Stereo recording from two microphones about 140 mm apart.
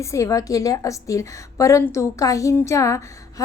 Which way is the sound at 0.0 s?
20° left (ahead or behind).